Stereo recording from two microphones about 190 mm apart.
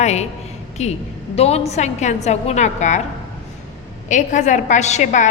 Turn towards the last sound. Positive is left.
turn(degrees=40)  # may be behind; listen again after turning